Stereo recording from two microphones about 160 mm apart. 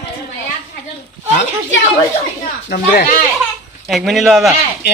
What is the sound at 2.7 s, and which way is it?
Speech, 65° left (ahead or behind).